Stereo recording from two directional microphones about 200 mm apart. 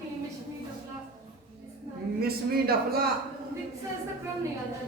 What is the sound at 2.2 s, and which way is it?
Speech, 50° right (ahead or behind).